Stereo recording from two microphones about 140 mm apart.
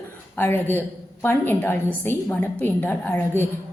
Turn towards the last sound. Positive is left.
turn(degrees=15)  # may be behind; listen again after turning